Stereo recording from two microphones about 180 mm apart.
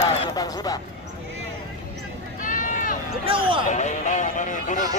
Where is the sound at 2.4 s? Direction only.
45° left (ahead or behind).